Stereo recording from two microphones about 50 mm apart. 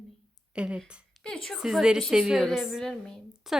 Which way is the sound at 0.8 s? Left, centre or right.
Centre.